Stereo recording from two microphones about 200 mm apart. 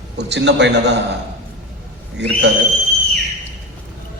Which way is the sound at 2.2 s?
60° right (ahead or behind).